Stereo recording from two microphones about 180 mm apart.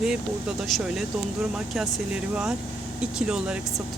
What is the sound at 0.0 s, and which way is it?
Speech, 5° right (ahead or behind).